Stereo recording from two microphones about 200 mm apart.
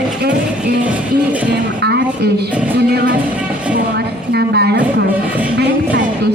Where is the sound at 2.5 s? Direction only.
5° right (ahead or behind).